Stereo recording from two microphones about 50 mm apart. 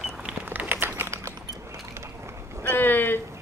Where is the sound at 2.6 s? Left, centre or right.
Left.